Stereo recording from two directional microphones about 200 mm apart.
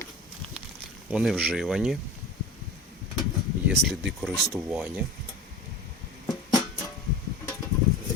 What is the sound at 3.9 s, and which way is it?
Speech, centre (ahead or behind).